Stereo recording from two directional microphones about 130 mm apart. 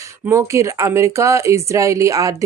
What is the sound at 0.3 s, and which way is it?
Speech, 20° right (ahead or behind).